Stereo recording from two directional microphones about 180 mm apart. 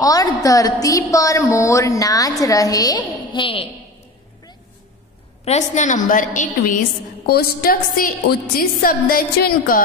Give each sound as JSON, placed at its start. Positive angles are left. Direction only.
{"t": 0.0, "sound": "a woman's voice", "side_deg": 20}
{"t": 5.4, "sound": "a woman's voice", "side_deg": 40}
{"t": 7.2, "sound": "a woman's voice", "side_deg": 55}